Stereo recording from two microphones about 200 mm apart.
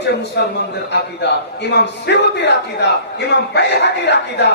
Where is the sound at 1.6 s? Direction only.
60° left (ahead or behind).